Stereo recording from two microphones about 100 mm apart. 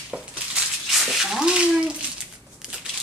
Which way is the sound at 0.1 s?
10° right (ahead or behind).